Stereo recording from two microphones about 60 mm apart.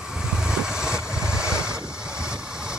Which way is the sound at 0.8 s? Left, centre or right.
Centre.